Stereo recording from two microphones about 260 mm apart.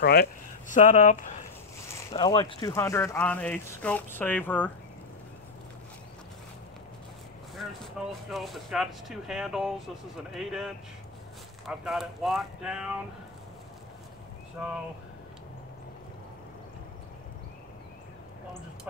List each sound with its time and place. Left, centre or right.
0.0 s speech: left
2.1 s speech: centre
7.5 s speech: centre